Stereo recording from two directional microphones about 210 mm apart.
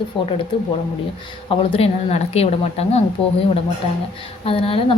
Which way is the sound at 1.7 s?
30° left (ahead or behind).